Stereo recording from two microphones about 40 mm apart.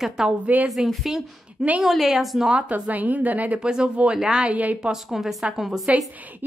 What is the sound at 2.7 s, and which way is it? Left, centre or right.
Speech, right.